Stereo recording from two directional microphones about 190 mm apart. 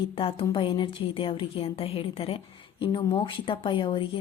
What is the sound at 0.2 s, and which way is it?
Speech, 30° left (ahead or behind).